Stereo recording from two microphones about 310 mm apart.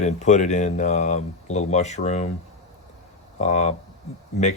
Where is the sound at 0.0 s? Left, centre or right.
Left.